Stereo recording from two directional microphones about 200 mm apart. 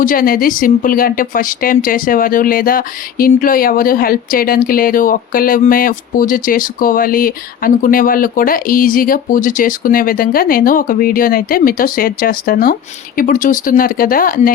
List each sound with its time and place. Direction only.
0.0 s a woman's voice: 45° left (ahead or behind)